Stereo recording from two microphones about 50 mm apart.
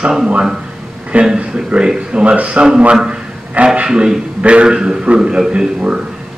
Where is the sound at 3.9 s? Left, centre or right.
Centre.